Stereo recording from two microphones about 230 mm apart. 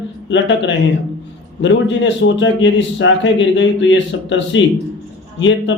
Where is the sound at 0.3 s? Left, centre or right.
Left.